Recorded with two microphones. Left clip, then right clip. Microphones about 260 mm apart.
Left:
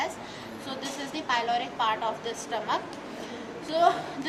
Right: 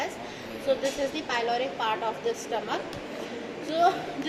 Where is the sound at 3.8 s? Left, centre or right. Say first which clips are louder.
Left 1 dB; left.